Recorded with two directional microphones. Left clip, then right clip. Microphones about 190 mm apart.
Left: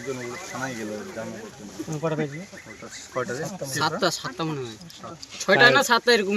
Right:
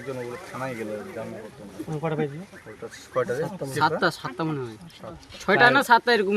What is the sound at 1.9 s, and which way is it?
Speech, 15° left (ahead or behind).